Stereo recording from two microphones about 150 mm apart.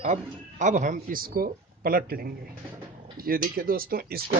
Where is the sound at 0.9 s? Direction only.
75° right (ahead or behind).